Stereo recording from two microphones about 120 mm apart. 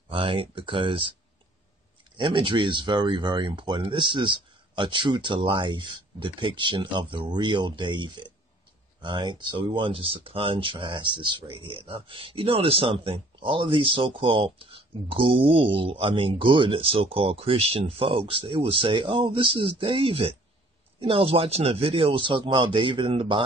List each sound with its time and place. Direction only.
0.1 s speech: 50° right (ahead or behind)
2.1 s speech: 40° right (ahead or behind)